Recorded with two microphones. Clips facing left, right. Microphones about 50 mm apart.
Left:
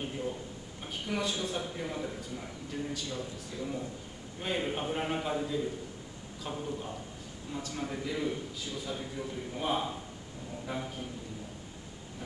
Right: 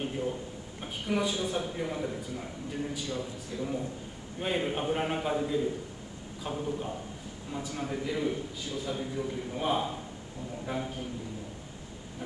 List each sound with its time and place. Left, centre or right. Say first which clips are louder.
0.0 s a man's voice: right 3 dB; centre
3.5 s speech: right 3 dB; centre
4.4 s a man's voice: right 3 dB; centre